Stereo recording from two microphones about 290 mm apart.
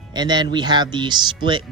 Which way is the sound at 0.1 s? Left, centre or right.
Centre.